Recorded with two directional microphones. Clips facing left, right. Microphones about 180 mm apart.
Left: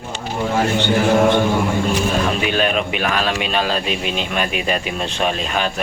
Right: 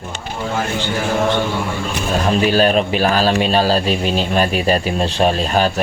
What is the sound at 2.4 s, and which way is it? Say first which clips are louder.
Speech: right 5 dB; 35° right (ahead or behind).